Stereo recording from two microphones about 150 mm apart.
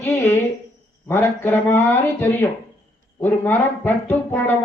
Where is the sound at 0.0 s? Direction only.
15° left (ahead or behind).